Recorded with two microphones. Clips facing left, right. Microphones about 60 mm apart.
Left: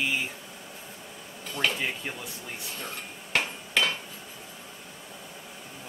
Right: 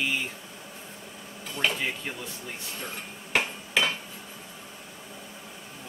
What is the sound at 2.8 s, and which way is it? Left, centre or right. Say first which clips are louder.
Cutlery: even; centre.